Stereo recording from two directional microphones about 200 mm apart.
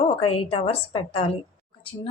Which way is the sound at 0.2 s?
30° left (ahead or behind).